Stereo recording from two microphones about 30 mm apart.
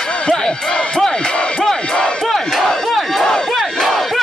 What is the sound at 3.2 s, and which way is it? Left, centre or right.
Battle cry, left.